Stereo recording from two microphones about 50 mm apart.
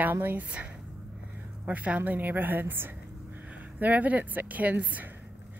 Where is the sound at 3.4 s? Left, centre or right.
Right.